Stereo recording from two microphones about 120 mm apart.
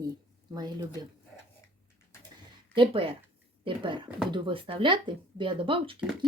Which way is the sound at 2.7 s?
45° right (ahead or behind).